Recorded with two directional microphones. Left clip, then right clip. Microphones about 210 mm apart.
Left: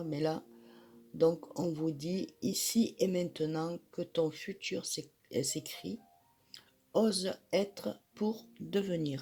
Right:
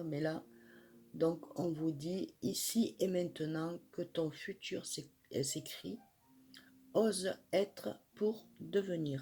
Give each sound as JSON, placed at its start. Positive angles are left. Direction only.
{"t": 0.1, "sound": "speech", "side_deg": 35}